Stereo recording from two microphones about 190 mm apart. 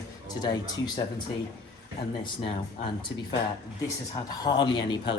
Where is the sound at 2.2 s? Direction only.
25° left (ahead or behind).